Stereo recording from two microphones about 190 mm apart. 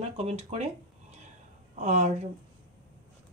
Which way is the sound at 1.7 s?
35° right (ahead or behind).